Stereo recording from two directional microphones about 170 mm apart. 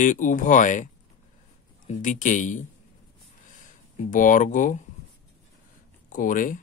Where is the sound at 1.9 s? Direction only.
50° left (ahead or behind).